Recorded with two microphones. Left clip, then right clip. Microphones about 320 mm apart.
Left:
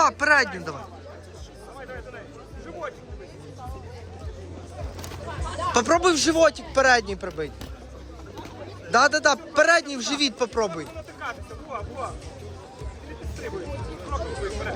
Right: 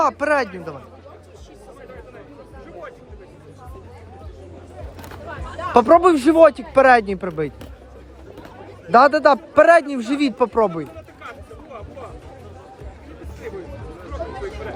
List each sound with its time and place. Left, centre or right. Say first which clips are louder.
0.0 s speech: right 1 dB; centre
5.7 s speech: right 8 dB; centre
8.9 s a man's voice: right 6 dB; centre